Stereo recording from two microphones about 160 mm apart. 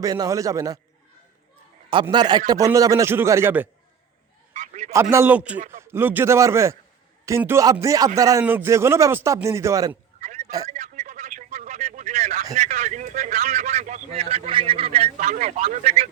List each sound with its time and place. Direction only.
0.0 s a man's voice: 20° right (ahead or behind)
1.9 s a man's voice: 30° right (ahead or behind); by 3.7 s 10° right (ahead or behind)
4.5 s a sound: 50° right (ahead or behind)
5.1 s a man's voice: 10° right (ahead or behind)
5.5 s speech: 50° right (ahead or behind)
5.8 s a man's voice: 15° right (ahead or behind)
10.2 s a sound: 50° right (ahead or behind)
12.5 s a man's voice: 50° right (ahead or behind)